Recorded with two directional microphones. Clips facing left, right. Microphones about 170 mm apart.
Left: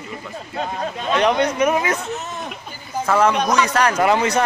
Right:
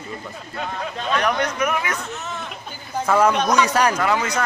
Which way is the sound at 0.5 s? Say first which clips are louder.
Left 3 dB; 30° left (ahead or behind).